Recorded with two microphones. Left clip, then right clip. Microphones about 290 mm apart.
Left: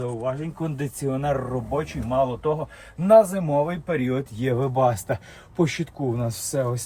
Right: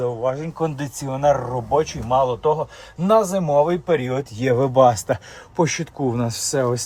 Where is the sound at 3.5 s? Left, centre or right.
Right.